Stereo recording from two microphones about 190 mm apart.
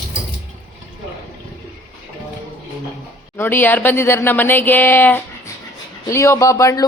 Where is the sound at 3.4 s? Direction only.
10° left (ahead or behind).